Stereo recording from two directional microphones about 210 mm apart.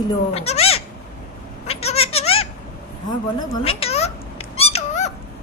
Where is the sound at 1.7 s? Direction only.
30° left (ahead or behind).